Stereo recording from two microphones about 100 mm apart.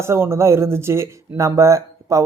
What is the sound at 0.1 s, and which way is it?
Speech, 25° right (ahead or behind).